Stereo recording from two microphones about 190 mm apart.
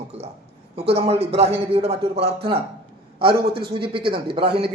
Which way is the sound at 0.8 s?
30° right (ahead or behind).